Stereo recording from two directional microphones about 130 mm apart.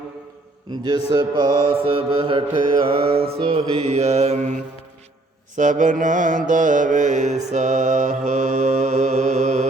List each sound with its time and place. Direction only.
0.9 s mantra: 35° right (ahead or behind); by 4.6 s 60° right (ahead or behind)
5.5 s music: 75° right (ahead or behind)
6.5 s mantra: 75° right (ahead or behind)